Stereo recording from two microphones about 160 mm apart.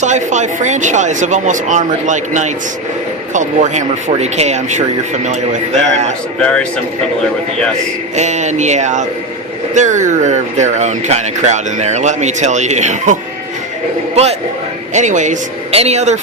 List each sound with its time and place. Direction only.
0.0 s speech: 50° right (ahead or behind)
6.4 s speech: 5° left (ahead or behind)
8.1 s speech: 45° right (ahead or behind)
14.9 s speech: 50° right (ahead or behind)